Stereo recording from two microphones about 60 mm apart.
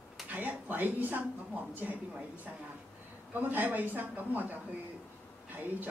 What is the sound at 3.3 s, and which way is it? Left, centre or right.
A man's voice, right.